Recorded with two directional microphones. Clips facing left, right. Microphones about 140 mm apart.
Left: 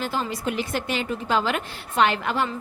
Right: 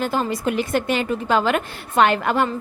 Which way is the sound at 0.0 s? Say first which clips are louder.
Right 5 dB; 50° right (ahead or behind).